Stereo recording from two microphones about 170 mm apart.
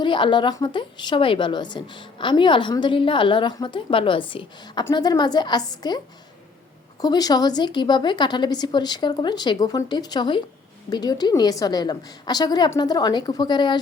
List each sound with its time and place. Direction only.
0.0 s a woman's voice: 30° left (ahead or behind)
7.0 s a woman's voice: 20° left (ahead or behind)